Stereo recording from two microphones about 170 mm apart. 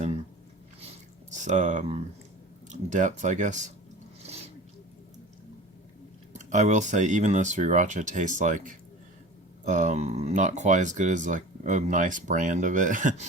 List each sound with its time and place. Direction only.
1.3 s speech: 45° right (ahead or behind)
4.2 s a sound: 40° right (ahead or behind)
6.3 s speech: 45° right (ahead or behind)